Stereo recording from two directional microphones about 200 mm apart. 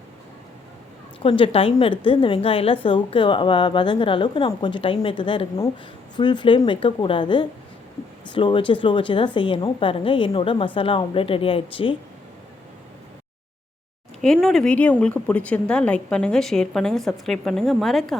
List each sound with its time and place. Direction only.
1.2 s a woman's voice: 25° left (ahead or behind)
14.4 s a woman's voice: 5° left (ahead or behind)